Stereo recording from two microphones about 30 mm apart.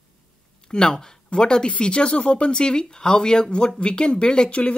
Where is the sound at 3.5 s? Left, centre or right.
Left.